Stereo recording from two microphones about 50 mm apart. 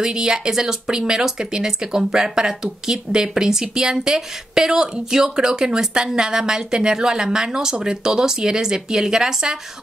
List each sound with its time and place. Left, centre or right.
0.0 s speech: centre